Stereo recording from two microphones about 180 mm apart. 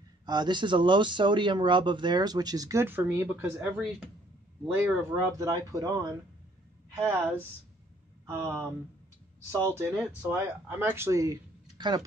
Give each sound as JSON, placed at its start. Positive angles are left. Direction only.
{"t": 0.2, "sound": "speech", "side_deg": -25}
{"t": 7.0, "sound": "speech", "side_deg": -15}